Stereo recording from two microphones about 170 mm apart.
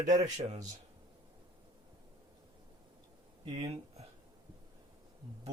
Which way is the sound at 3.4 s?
35° right (ahead or behind).